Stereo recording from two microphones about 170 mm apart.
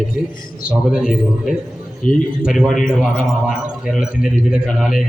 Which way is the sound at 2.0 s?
50° left (ahead or behind).